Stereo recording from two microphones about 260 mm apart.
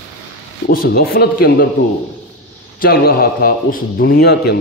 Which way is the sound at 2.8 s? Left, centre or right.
Left.